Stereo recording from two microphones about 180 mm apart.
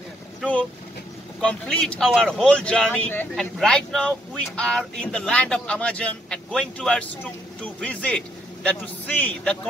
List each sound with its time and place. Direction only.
0.4 s a man's voice: 5° left (ahead or behind)